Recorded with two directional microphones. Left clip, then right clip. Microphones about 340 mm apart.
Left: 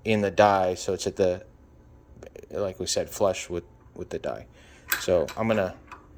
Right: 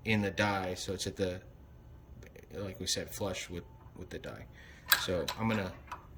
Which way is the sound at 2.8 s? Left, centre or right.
Centre.